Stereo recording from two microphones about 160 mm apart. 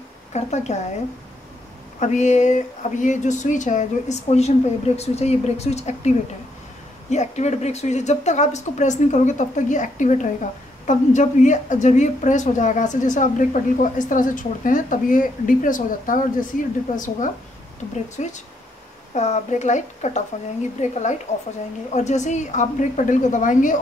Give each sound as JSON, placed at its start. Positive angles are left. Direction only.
{"t": 0.3, "sound": "a woman's voice", "side_deg": 45}
{"t": 2.0, "sound": "a woman's voice", "side_deg": 50}